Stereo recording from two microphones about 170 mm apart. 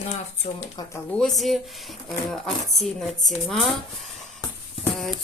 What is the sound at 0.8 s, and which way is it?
Speech, 20° left (ahead or behind).